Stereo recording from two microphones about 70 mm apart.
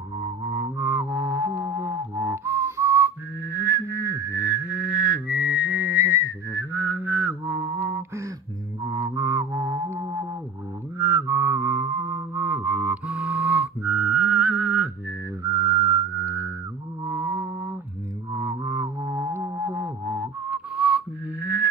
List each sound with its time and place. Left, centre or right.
0.2 s music: right
3.4 s a sound: right
5.9 s whistling: right
6.7 s mantra: right
8.8 s music: right
12.4 s music: right
15.4 s a sound: right
17.0 s music: right
18.3 s music: right
20.1 s whistling: centre